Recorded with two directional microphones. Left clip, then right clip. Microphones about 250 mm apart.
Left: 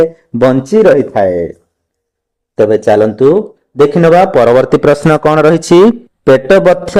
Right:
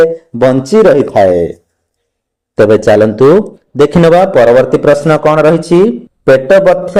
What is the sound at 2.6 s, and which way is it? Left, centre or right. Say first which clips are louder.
A man's voice: right 2 dB; centre.